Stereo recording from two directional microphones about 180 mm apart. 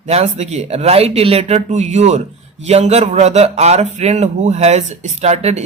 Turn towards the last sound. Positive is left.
turn(degrees=-40)  # may be behind; listen again after turning